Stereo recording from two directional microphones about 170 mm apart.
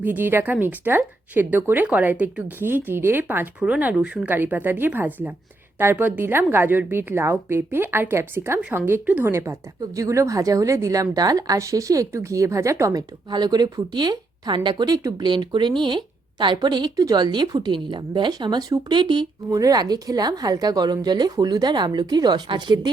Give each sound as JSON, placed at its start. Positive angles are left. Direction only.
{"t": 0.0, "sound": "a woman's voice", "side_deg": -10}